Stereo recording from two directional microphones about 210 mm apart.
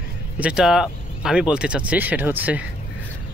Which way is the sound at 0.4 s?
5° right (ahead or behind).